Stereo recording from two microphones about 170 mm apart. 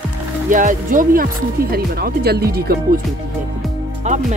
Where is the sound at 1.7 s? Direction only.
65° right (ahead or behind).